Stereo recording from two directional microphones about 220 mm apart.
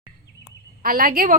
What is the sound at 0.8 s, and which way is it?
Speech, 40° right (ahead or behind).